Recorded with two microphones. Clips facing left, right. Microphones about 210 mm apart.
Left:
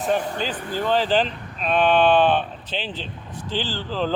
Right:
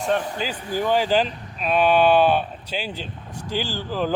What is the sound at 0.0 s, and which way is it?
Speech, centre (ahead or behind).